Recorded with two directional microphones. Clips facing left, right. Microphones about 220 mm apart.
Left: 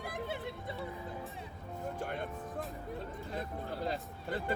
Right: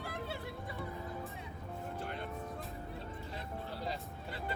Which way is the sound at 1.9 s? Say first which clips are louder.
Left 3 dB; 50° left (ahead or behind).